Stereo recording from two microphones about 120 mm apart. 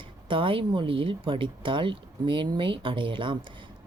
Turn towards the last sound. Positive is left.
turn(degrees=-45)  # may be behind; listen again after turning